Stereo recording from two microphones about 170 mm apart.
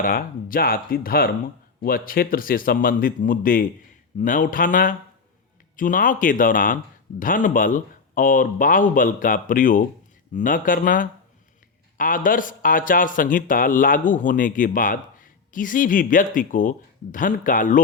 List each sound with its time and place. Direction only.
0.0 s a man's voice: 55° left (ahead or behind)